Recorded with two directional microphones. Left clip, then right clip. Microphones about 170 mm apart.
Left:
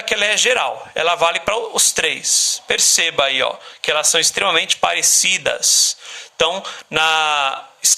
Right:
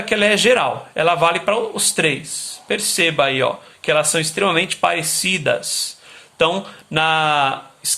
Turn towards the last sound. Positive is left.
turn(degrees=30)  # may be behind; listen again after turning